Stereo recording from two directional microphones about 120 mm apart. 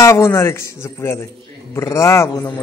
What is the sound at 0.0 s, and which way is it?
Speech, 20° left (ahead or behind).